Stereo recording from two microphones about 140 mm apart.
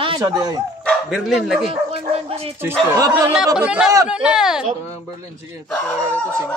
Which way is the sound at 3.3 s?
5° right (ahead or behind).